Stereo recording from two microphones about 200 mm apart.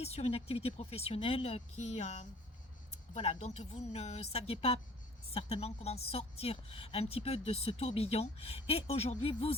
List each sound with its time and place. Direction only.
0.0 s speech: 30° left (ahead or behind)
3.4 s speech: 35° left (ahead or behind)